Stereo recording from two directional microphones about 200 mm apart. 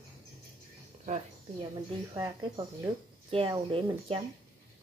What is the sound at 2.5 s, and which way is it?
Speech, 25° right (ahead or behind).